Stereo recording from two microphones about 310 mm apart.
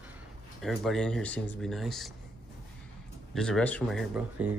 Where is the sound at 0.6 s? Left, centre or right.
Centre.